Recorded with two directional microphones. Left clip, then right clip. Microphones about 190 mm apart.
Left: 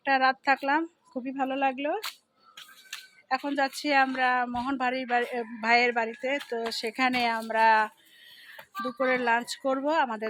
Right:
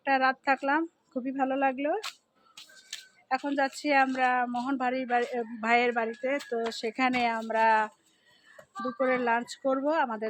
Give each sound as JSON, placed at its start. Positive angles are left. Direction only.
{"t": 0.0, "sound": "speech", "side_deg": 0}
{"t": 2.9, "sound": "a sound", "side_deg": 40}
{"t": 3.2, "sound": "speech", "side_deg": 5}
{"t": 9.0, "sound": "speech", "side_deg": 0}